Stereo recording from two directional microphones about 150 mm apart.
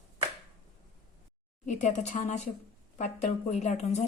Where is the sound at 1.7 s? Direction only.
55° left (ahead or behind).